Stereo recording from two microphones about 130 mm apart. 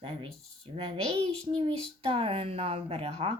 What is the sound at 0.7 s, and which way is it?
Speech, 45° right (ahead or behind).